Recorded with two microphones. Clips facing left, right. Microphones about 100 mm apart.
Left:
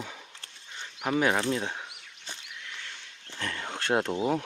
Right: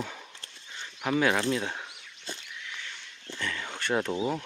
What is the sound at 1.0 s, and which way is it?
Speech, 25° left (ahead or behind).